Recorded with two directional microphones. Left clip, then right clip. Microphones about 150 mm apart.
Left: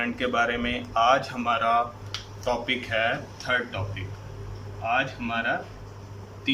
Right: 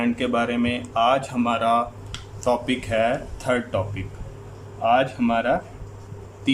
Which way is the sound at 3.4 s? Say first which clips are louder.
Right 3 dB; 45° right (ahead or behind).